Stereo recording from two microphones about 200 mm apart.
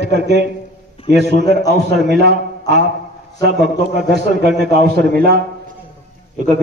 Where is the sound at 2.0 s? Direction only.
55° right (ahead or behind).